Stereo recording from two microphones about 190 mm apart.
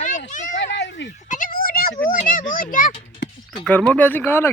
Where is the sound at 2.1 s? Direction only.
45° left (ahead or behind).